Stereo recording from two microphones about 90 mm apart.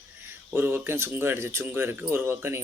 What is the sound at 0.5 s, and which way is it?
Speech, 25° right (ahead or behind).